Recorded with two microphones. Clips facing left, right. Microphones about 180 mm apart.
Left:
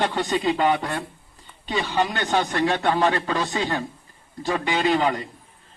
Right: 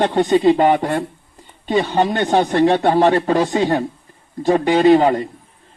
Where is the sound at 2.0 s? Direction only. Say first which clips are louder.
Right 7 dB; 30° right (ahead or behind).